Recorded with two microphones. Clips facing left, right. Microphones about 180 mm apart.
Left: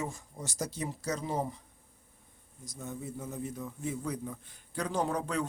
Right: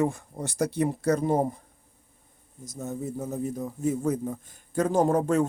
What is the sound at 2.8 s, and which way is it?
A man's voice, 40° right (ahead or behind).